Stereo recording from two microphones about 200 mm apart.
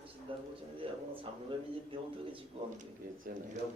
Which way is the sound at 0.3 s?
25° right (ahead or behind).